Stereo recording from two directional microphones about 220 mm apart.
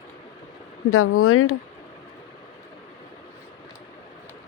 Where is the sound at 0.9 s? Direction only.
70° left (ahead or behind).